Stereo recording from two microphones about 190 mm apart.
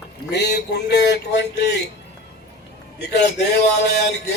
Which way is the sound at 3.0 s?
60° left (ahead or behind).